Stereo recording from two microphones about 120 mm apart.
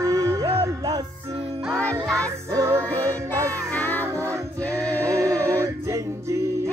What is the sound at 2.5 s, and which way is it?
Music, 25° right (ahead or behind).